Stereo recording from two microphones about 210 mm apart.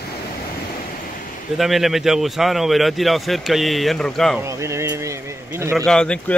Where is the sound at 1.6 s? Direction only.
Centre (ahead or behind).